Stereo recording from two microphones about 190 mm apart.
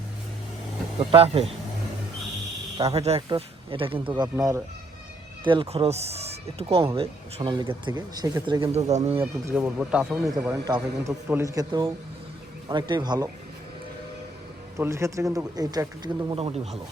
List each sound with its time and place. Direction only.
1.1 s speech: 30° right (ahead or behind)
2.9 s speech: 30° right (ahead or behind)
9.2 s speech: 5° right (ahead or behind); by 13.2 s 20° right (ahead or behind)
14.8 s speech: 15° right (ahead or behind)
16.3 s speech: 30° right (ahead or behind)